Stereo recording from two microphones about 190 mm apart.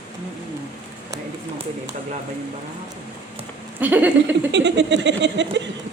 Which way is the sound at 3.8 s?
10° right (ahead or behind).